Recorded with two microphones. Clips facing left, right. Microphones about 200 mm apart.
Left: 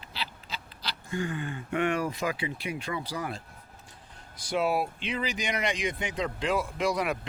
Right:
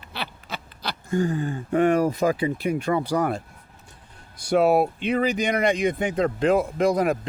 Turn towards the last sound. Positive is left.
turn(degrees=-45)  # may be behind; listen again after turning